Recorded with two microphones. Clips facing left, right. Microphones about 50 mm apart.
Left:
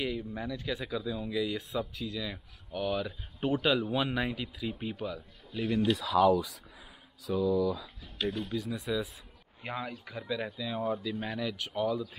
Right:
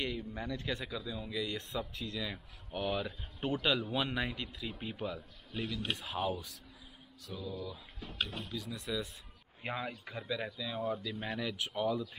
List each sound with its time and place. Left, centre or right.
0.0 s speech: centre
3.1 s speech: centre
4.9 s a man's voice: centre
6.0 s speech: left
7.2 s speech: left
8.5 s speech: centre